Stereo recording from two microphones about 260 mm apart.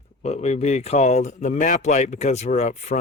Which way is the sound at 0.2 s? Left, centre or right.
Left.